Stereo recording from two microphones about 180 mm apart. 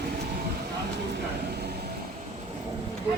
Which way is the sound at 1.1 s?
60° right (ahead or behind).